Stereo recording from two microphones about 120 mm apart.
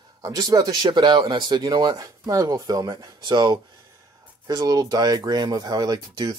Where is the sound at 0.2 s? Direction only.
30° right (ahead or behind).